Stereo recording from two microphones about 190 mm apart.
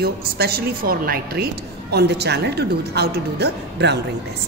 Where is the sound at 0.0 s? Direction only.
55° right (ahead or behind).